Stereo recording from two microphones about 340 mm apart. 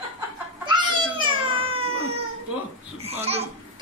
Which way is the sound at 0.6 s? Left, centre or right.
Centre.